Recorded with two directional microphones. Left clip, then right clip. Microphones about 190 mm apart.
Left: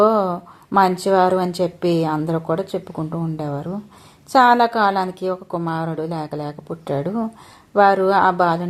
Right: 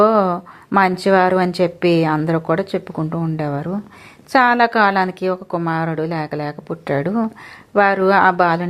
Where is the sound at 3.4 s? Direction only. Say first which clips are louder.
Right 4 dB; 20° right (ahead or behind).